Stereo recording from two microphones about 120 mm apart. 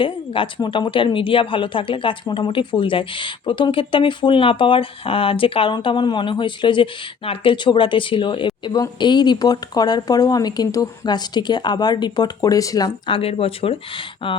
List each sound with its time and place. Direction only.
0.0 s a woman's voice: 45° left (ahead or behind); by 12.9 s 30° left (ahead or behind)
13.1 s a woman's voice: 50° left (ahead or behind)